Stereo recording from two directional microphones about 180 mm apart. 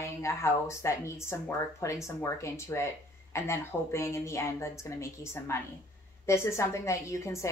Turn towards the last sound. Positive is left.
turn(degrees=15)  # may be behind; listen again after turning